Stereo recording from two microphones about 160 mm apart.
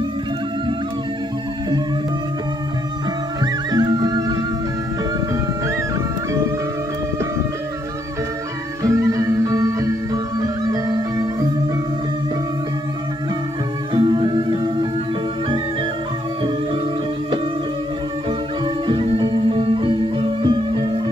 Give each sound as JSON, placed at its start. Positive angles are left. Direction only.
{"t": 3.7, "sound": "music", "side_deg": -25}
{"t": 8.8, "sound": "music", "side_deg": -20}
{"t": 13.9, "sound": "music", "side_deg": -30}
{"t": 18.9, "sound": "music", "side_deg": -30}